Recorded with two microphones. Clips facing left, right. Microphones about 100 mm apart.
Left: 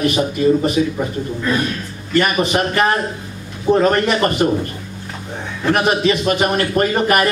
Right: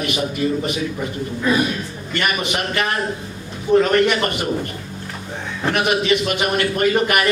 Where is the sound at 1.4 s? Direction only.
10° right (ahead or behind).